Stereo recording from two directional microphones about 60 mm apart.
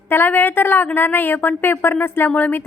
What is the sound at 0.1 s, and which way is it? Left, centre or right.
A woman's voice, left.